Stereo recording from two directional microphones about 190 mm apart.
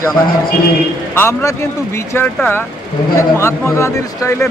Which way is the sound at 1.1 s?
15° left (ahead or behind).